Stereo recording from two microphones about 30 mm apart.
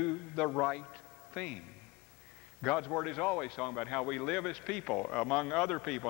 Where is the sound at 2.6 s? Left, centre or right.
Left.